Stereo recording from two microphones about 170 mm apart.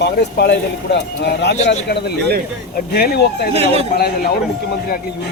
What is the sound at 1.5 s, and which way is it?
Speech, 40° left (ahead or behind).